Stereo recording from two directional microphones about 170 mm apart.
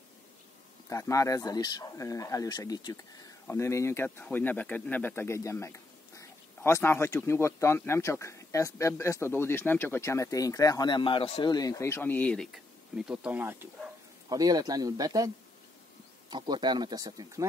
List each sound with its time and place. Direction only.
0.8 s speech: 20° left (ahead or behind); by 11.5 s 35° left (ahead or behind)
11.5 s speech: 20° left (ahead or behind); by 17.5 s 20° right (ahead or behind)